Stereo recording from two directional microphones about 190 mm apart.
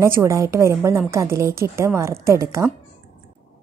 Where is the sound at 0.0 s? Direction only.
15° right (ahead or behind).